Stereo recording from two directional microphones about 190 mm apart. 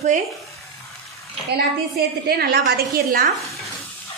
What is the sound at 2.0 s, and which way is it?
A woman's voice, 55° right (ahead or behind).